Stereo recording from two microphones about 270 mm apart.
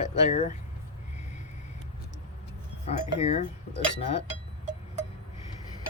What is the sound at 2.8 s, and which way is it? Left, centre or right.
Speech, left.